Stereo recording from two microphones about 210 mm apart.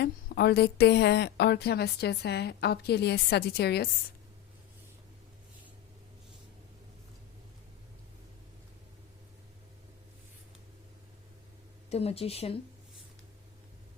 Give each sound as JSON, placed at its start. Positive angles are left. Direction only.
{"t": 0.0, "sound": "a woman's voice", "side_deg": 50}
{"t": 11.9, "sound": "speech", "side_deg": 30}